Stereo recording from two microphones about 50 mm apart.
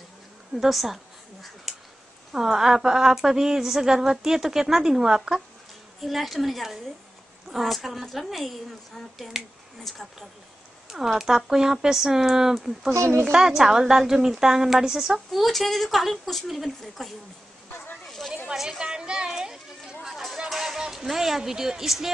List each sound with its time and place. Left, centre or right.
0.6 s a woman's voice: centre
1.7 s a sound: centre
2.3 s a woman's voice: centre
5.9 s a woman's voice: centre
12.9 s speech: right
13.2 s a woman's voice: centre
17.6 s a sound: left
18.5 s a sound: centre
20.3 s speech: centre